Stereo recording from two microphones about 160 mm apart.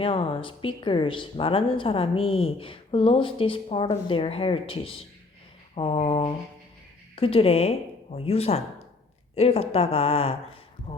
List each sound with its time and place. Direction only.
0.0 s speech: 35° left (ahead or behind)